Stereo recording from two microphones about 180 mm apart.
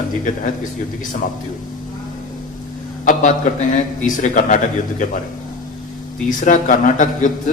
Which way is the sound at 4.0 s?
45° left (ahead or behind).